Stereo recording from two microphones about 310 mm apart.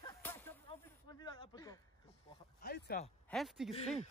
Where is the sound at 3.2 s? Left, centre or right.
Centre.